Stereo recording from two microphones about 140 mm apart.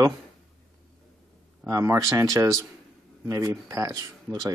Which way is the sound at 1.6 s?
25° right (ahead or behind).